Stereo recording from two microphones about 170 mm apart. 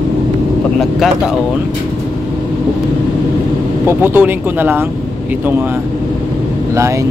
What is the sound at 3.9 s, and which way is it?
Speech, 10° right (ahead or behind).